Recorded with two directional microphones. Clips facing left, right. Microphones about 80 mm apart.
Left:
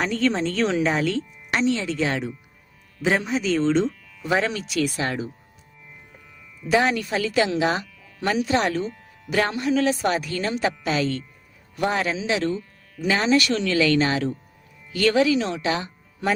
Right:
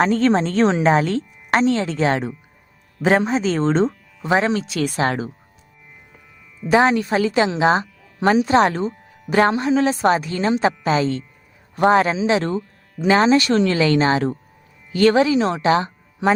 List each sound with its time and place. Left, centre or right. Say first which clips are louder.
0.0 s speech: right 6 dB; right
6.7 s speech: right 5 dB; right